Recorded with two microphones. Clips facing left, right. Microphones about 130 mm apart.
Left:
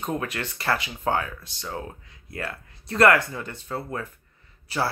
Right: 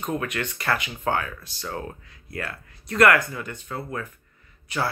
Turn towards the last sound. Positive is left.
turn(degrees=30)  # may be behind; listen again after turning